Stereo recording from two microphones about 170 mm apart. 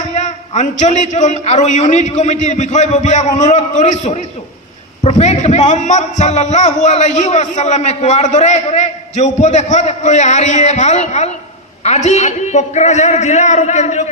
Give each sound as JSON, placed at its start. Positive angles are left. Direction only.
{"t": 0.0, "sound": "a man's voice", "side_deg": 45}